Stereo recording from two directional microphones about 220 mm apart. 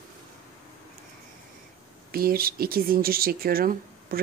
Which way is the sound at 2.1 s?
40° right (ahead or behind).